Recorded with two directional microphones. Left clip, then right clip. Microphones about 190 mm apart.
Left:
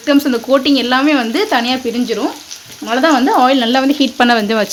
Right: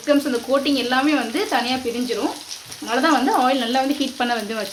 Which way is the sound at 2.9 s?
45° left (ahead or behind).